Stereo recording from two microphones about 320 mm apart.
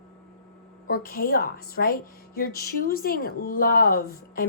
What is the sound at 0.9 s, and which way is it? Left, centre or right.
Speech, left.